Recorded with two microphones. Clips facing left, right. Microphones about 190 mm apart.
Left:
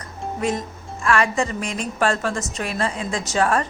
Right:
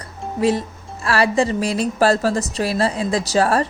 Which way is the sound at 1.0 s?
35° right (ahead or behind).